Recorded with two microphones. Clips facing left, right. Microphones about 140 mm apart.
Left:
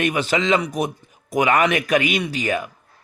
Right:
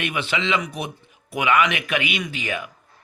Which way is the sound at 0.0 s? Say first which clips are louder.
Left 5 dB; 40° left (ahead or behind).